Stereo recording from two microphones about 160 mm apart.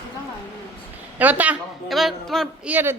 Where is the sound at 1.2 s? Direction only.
10° right (ahead or behind).